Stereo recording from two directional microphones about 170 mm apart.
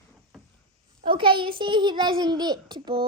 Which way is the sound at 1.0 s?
30° right (ahead or behind).